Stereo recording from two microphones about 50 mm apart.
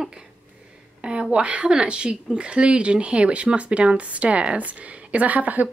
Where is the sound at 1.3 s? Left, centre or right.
Right.